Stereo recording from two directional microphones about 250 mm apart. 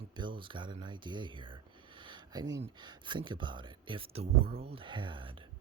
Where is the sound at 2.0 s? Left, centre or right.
Centre.